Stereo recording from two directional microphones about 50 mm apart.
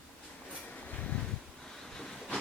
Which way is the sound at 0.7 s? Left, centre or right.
Left.